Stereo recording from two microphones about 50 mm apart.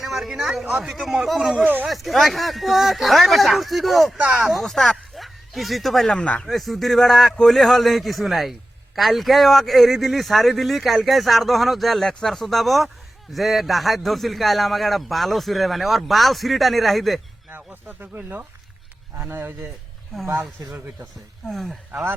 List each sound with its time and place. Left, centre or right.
0.0 s a sound: centre
0.6 s speech: centre
0.9 s speech: centre
1.6 s speech: right
1.9 s speech: centre
4.6 s speech: centre
6.1 s speech: left
6.4 s speech: centre
17.8 s speech: right
19.1 s speech: right
21.5 s speech: centre